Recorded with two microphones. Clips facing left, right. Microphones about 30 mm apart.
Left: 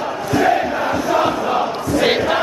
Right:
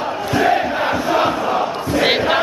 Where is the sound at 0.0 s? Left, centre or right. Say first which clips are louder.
Even; right.